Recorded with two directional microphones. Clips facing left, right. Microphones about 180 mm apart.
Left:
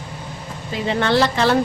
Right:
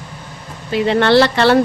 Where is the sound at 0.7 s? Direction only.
70° right (ahead or behind).